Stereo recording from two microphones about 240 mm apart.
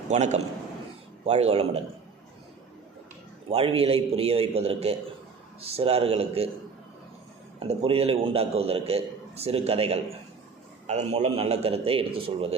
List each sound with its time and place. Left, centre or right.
0.1 s a man's voice: right
3.5 s a man's voice: right
7.7 s a man's voice: right